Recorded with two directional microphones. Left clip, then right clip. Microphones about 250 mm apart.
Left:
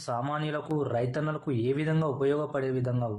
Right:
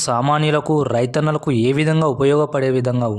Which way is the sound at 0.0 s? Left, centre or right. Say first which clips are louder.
Right 14 dB; right.